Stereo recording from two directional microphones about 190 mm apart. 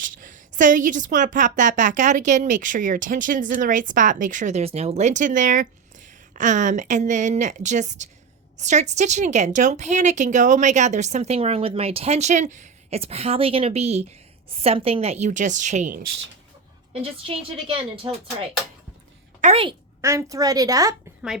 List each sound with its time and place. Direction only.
0.0 s a woman's voice: 45° right (ahead or behind)
20.0 s a woman's voice: 15° right (ahead or behind)